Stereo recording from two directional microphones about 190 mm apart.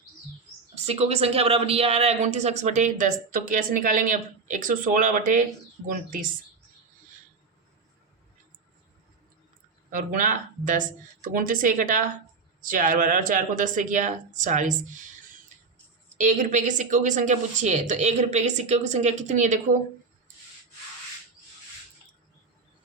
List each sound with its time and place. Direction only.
0.9 s speech: 35° right (ahead or behind)
9.9 s speech: 45° right (ahead or behind)
16.1 s speech: 40° right (ahead or behind)